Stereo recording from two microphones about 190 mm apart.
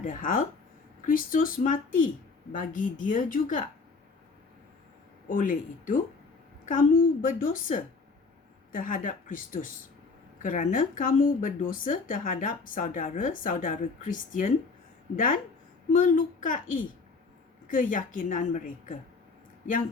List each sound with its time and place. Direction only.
0.0 s speech: 40° left (ahead or behind)
5.3 s speech: 45° left (ahead or behind)